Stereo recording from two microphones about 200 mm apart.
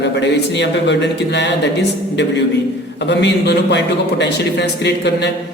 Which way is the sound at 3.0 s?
60° left (ahead or behind).